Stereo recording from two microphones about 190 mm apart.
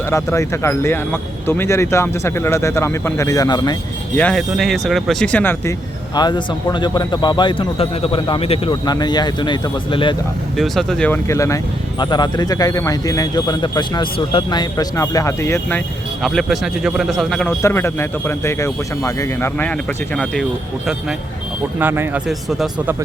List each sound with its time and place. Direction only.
0.1 s speech: 15° left (ahead or behind)
4.2 s speech: 5° left (ahead or behind)
6.1 s speech: 20° left (ahead or behind)
10.6 s speech: centre (ahead or behind)
16.2 s speech: centre (ahead or behind)
17.6 s speech: 15° left (ahead or behind)
21.8 s speech: 10° right (ahead or behind)